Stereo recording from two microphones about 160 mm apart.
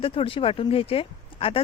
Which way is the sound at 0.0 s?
35° left (ahead or behind).